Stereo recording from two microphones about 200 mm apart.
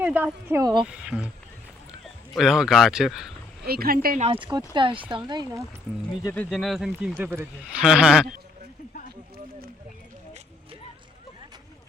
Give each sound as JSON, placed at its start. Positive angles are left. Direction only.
{"t": 0.0, "sound": "speech", "side_deg": -10}
{"t": 0.8, "sound": "a man's voice", "side_deg": -5}
{"t": 2.3, "sound": "a man's voice", "side_deg": 0}
{"t": 3.7, "sound": "speech", "side_deg": -50}
{"t": 4.2, "sound": "speech", "side_deg": -25}
{"t": 6.2, "sound": "a man's voice", "side_deg": 5}